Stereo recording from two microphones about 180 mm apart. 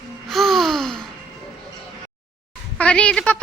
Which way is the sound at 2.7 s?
5° left (ahead or behind).